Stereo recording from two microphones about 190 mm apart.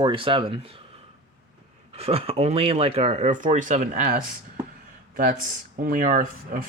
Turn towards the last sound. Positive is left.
turn(degrees=-45)  # may be behind; listen again after turning